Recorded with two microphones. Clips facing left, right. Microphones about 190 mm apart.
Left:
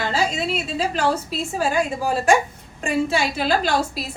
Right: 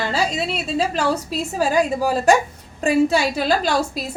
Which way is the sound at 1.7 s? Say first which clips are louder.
Right 5 dB; 40° right (ahead or behind).